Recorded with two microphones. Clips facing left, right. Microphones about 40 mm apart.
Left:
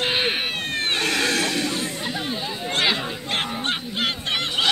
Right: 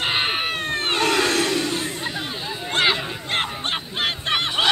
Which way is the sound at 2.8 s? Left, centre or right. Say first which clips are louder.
Right 2 dB; right.